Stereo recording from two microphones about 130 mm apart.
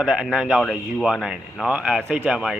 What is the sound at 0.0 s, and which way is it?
Speech, 5° right (ahead or behind).